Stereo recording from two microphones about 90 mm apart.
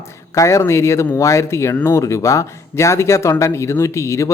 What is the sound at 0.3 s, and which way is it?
Speech, 35° left (ahead or behind).